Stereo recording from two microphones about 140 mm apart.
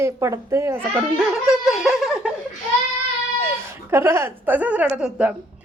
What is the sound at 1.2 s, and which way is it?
Giggle, 5° right (ahead or behind).